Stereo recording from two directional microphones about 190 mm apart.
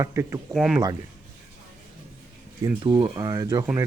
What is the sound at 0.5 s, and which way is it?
Speech, 5° right (ahead or behind).